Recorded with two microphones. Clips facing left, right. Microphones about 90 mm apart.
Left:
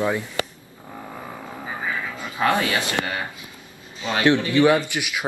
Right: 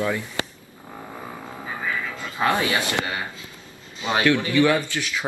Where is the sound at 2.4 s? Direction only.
20° right (ahead or behind).